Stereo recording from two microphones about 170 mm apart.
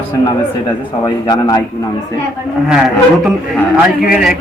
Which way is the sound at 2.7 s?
5° right (ahead or behind).